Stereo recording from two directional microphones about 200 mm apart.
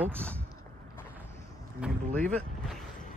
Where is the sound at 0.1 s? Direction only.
5° left (ahead or behind).